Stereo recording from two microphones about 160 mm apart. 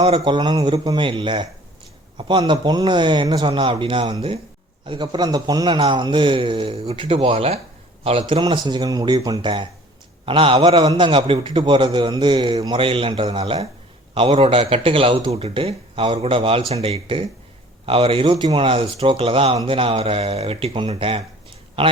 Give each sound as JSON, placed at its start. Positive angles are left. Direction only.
{"t": 0.0, "sound": "a man's voice", "side_deg": -30}